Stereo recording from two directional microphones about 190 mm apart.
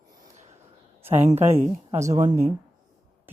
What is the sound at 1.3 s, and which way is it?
Speech, 35° right (ahead or behind).